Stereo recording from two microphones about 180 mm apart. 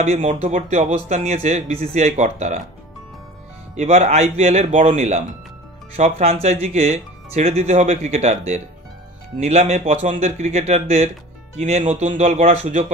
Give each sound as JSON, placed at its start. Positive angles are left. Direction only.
{"t": 0.0, "sound": "speech", "side_deg": -40}
{"t": 3.7, "sound": "speech", "side_deg": -35}